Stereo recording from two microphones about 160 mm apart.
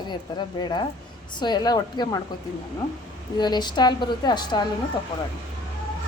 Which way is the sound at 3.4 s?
25° left (ahead or behind).